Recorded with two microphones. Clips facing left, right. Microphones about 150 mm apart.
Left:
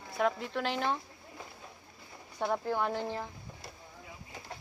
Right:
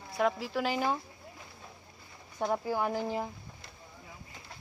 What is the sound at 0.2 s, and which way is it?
Speech, centre (ahead or behind).